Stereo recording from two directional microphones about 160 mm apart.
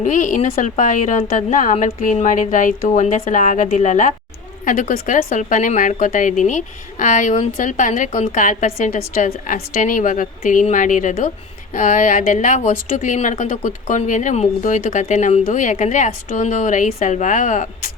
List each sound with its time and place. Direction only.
0.0 s a woman's voice: 50° left (ahead or behind)